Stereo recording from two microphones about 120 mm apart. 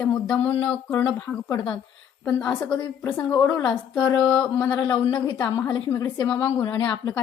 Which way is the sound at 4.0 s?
35° left (ahead or behind).